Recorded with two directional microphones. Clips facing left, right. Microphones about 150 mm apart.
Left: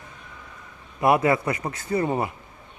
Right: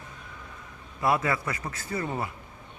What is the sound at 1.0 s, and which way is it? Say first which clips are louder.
Speech: left 6 dB; 20° left (ahead or behind).